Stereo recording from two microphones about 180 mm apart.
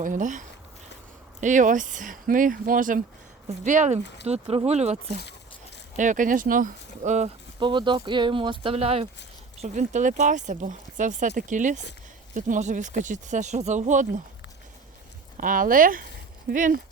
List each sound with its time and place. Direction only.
0.0 s speech: 45° right (ahead or behind)
6.0 s speech: 45° right (ahead or behind)
7.6 s speech: 25° right (ahead or behind); by 14.2 s 45° right (ahead or behind)
15.4 s speech: 50° right (ahead or behind)